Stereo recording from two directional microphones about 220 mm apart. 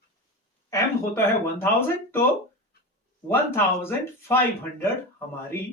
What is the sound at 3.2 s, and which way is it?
Speech, 10° left (ahead or behind).